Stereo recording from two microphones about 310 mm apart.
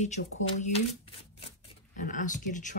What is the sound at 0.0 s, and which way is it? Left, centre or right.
Speech, left.